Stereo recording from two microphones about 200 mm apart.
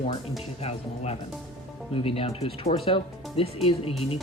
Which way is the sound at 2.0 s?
30° left (ahead or behind).